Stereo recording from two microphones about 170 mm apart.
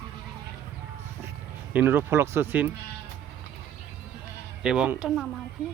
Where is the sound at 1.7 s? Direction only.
10° right (ahead or behind).